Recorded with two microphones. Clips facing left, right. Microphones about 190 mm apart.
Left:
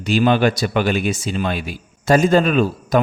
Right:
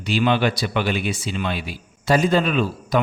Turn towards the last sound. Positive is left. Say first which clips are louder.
# left 4 dB
turn(degrees=45)  # may be behind; listen again after turning